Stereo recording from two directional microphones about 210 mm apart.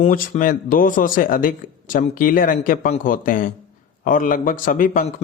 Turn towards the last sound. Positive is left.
turn(degrees=40)  # may be behind; listen again after turning